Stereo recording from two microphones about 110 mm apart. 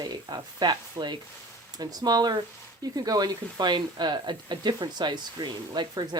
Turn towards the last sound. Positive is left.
turn(degrees=-40)  # may be behind; listen again after turning